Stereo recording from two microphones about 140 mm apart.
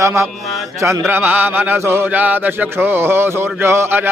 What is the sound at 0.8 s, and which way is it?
A man's voice, 20° right (ahead or behind).